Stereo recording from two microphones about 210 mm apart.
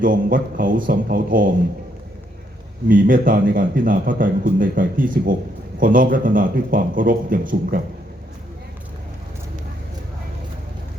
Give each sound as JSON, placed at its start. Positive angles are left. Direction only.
{"t": 0.0, "sound": "a man's voice", "side_deg": -40}
{"t": 2.9, "sound": "a man's voice", "side_deg": -40}